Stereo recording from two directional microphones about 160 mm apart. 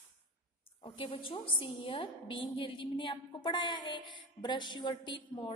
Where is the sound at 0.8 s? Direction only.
35° left (ahead or behind).